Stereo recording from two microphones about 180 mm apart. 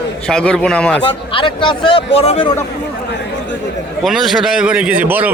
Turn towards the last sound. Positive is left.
turn(degrees=-10)  # may be behind; listen again after turning